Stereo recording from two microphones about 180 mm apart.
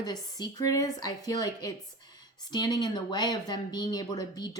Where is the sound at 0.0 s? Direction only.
20° left (ahead or behind).